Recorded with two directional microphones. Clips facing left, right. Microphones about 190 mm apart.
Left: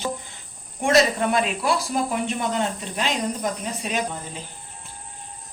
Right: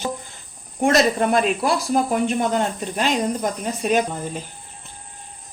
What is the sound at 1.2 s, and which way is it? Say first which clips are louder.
Speech: right 3 dB; 45° right (ahead or behind).